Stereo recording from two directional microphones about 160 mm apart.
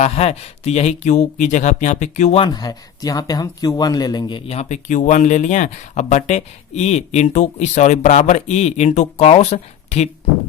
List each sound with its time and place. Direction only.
0.0 s speech: 40° left (ahead or behind)
2.4 s speech: 25° left (ahead or behind); by 10.1 s 45° left (ahead or behind)